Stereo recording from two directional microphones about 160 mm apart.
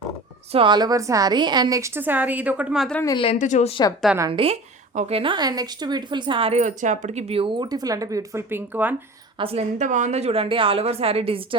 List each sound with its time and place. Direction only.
0.5 s a woman's voice: 30° right (ahead or behind); by 2.9 s 5° right (ahead or behind)
2.9 s a woman's voice: 20° left (ahead or behind)
3.3 s a woman's voice: 50° left (ahead or behind)
4.3 s a woman's voice: 35° right (ahead or behind)
6.6 s a woman's voice: 50° right (ahead or behind); by 9.0 s 10° right (ahead or behind)
9.4 s a woman's voice: 40° right (ahead or behind)